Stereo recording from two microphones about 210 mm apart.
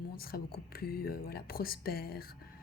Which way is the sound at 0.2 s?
45° left (ahead or behind).